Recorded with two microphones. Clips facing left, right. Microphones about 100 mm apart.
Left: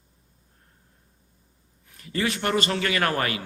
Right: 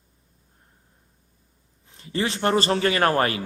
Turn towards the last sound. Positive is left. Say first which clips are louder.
# right 4 dB
turn(degrees=-35)  # may be behind; listen again after turning